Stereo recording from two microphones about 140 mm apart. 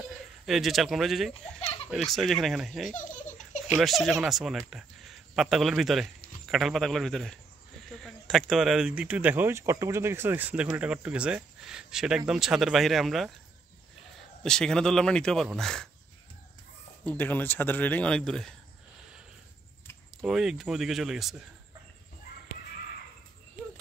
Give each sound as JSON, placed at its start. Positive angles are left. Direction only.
{"t": 0.5, "sound": "speech", "side_deg": 0}
{"t": 2.9, "sound": "baby laughter", "side_deg": 65}
{"t": 3.7, "sound": "speech", "side_deg": 0}
{"t": 14.4, "sound": "speech", "side_deg": 5}
{"t": 17.0, "sound": "speech", "side_deg": 10}
{"t": 20.2, "sound": "speech", "side_deg": -5}